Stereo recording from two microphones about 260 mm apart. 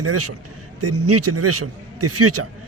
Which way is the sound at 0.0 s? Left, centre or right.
Right.